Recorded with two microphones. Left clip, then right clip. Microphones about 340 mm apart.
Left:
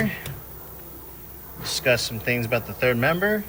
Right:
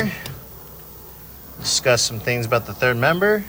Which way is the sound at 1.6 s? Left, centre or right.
Centre.